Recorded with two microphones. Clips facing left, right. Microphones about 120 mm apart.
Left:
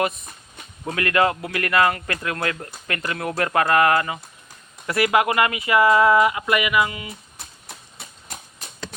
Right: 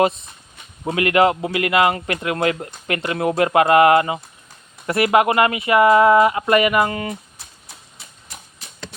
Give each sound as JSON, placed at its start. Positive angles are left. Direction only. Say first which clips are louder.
{"t": 0.0, "sound": "speech", "louder": "right 6 dB", "side_deg": -30}